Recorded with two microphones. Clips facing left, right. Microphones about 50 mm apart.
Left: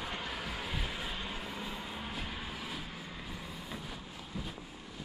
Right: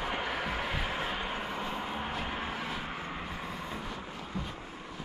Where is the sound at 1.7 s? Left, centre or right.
Right.